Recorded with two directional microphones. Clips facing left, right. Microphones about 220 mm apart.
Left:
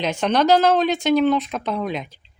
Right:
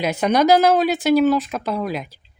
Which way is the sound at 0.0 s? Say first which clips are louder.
Right 2 dB; 10° right (ahead or behind).